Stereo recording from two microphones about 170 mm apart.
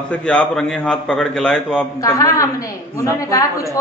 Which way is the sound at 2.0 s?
20° left (ahead or behind).